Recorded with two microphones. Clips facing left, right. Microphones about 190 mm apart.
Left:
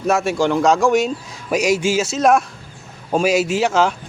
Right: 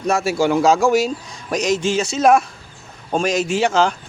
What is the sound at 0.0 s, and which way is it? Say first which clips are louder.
A man's voice: left 1 dB; centre (ahead or behind).